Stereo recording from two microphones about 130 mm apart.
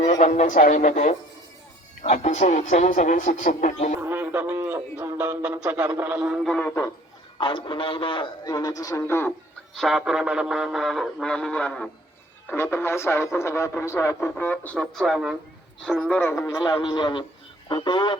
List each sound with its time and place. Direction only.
0.0 s speech: 65° left (ahead or behind); by 0.9 s 85° left
2.0 s speech: 65° left (ahead or behind)
4.0 s a sound: 15° right (ahead or behind)
4.5 s a man's voice: 20° right (ahead or behind)
6.4 s a man's voice: 10° left (ahead or behind)
7.3 s a man's voice: 40° left (ahead or behind)
8.4 s speech: 30° left (ahead or behind)
9.7 s speech: centre (ahead or behind)
12.5 s speech: 20° left (ahead or behind); by 15.4 s 5° right (ahead or behind)
15.9 s a man's voice: 5° left (ahead or behind)
16.6 s a man's voice: 30° left (ahead or behind)